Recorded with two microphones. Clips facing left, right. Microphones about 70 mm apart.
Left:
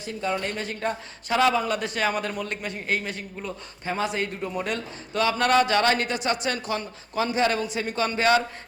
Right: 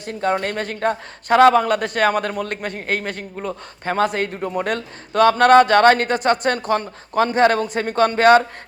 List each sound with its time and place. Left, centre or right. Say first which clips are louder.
0.0 s speech: right 7 dB; right